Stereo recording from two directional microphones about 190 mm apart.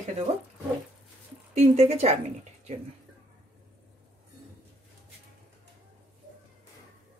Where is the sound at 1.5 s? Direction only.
35° right (ahead or behind).